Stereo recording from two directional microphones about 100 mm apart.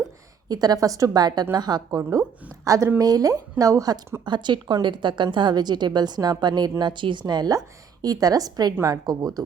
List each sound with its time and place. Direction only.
0.4 s a woman's voice: 40° right (ahead or behind)
4.3 s a woman's voice: 50° right (ahead or behind)